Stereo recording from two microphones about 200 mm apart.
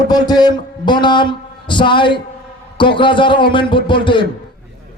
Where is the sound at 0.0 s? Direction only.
20° left (ahead or behind).